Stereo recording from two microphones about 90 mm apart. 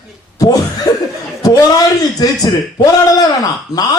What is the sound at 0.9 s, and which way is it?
Speech, 40° left (ahead or behind).